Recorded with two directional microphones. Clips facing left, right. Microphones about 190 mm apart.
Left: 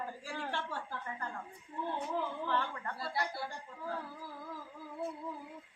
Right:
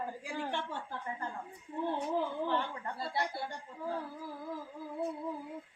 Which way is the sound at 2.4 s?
20° right (ahead or behind).